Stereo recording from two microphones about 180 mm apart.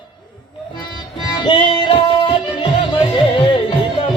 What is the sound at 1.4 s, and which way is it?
Music, 30° left (ahead or behind).